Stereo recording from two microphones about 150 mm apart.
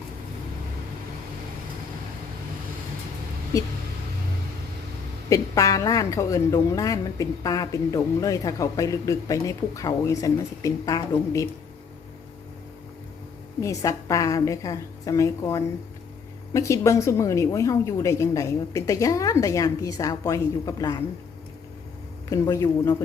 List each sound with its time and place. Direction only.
5.3 s a woman's voice: 20° left (ahead or behind)
13.6 s a woman's voice: 20° left (ahead or behind)
22.3 s a woman's voice: 20° left (ahead or behind)